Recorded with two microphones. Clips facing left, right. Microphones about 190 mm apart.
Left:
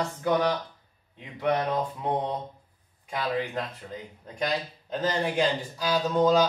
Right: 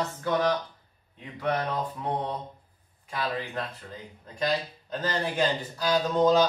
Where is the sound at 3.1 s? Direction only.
20° left (ahead or behind).